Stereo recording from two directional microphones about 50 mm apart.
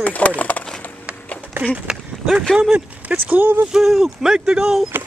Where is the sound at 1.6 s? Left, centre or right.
Right.